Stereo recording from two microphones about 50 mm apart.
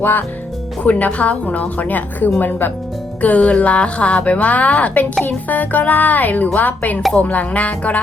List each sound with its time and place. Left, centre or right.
0.0 s speech: left
0.9 s speech: left
3.2 s speech: left